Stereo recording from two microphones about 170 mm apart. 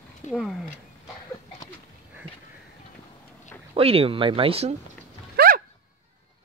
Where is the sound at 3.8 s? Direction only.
35° right (ahead or behind).